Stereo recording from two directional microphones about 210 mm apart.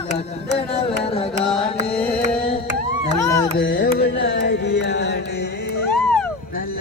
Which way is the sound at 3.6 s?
45° left (ahead or behind).